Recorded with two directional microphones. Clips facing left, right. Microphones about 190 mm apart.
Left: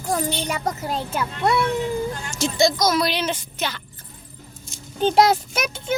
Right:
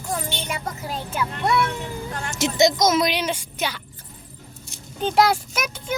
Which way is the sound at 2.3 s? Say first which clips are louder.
Right 2 dB; 20° right (ahead or behind).